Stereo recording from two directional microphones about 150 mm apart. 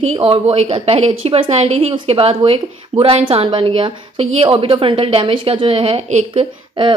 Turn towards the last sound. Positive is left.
turn(degrees=-35)  # may be behind; listen again after turning